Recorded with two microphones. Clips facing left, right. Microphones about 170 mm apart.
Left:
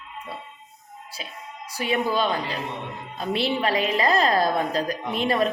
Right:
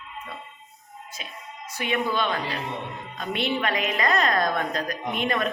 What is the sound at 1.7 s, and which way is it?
A woman's voice, 35° left (ahead or behind).